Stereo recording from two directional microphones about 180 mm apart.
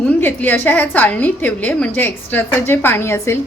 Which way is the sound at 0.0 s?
10° left (ahead or behind).